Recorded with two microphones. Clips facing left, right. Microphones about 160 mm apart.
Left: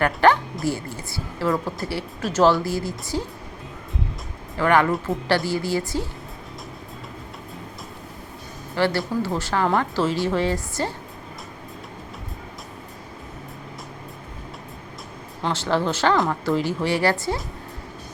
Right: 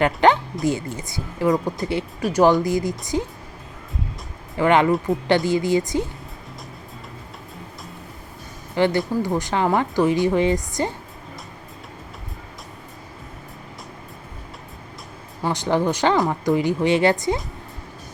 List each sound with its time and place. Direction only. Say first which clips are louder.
0.0 s speech: right 1 dB; 20° right (ahead or behind)
4.5 s speech: right 2 dB; 20° right (ahead or behind)
5.1 s speech: right 3 dB; centre (ahead or behind)
5.5 s speech: right 5 dB; 20° right (ahead or behind)
8.7 s speech: right 3 dB; 20° right (ahead or behind)
15.4 s speech: right 2 dB; 15° right (ahead or behind)